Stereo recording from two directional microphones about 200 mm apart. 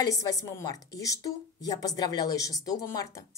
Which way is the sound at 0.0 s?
15° left (ahead or behind).